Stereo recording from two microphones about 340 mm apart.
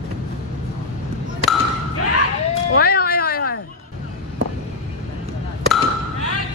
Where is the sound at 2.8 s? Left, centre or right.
Left.